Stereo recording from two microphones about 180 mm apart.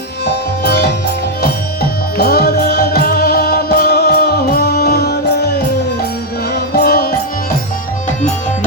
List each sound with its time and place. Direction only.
0.3 s music: 65° left (ahead or behind)
6.7 s music: 60° left (ahead or behind)